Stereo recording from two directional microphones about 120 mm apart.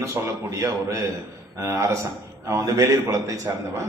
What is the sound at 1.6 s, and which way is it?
A man's voice, 25° right (ahead or behind).